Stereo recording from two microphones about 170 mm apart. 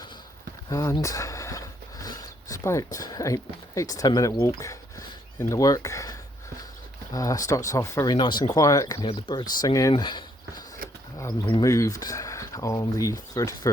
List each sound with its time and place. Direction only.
0.7 s speech: 20° left (ahead or behind)